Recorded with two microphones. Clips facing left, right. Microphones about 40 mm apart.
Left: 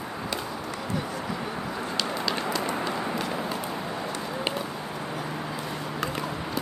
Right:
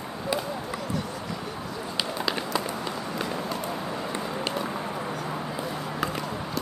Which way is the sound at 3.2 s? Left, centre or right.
Centre.